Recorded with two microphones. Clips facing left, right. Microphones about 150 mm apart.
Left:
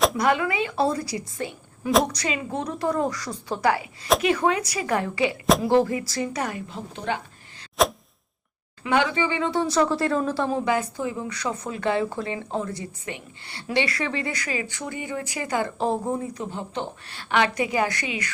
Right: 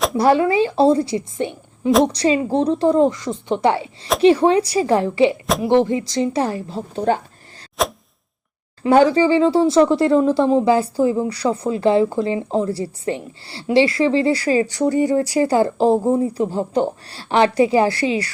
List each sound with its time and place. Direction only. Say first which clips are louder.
0.2 s speech: right 8 dB; 30° right (ahead or behind)
7.8 s a sound: even; centre (ahead or behind)
8.8 s a woman's voice: right 10 dB; 40° right (ahead or behind)